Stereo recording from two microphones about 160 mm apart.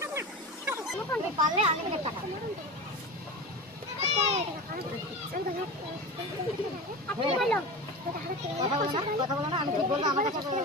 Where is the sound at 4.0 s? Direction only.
45° right (ahead or behind).